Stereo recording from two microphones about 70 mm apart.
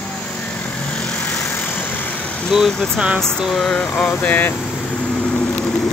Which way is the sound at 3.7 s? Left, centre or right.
Centre.